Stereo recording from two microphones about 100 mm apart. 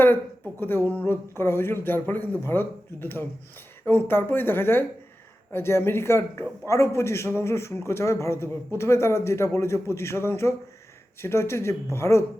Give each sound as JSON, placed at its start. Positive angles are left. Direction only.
{"t": 0.6, "sound": "a man's voice", "side_deg": 20}